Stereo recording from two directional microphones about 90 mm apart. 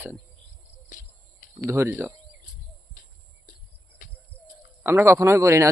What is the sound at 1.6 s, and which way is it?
Speech, 30° right (ahead or behind).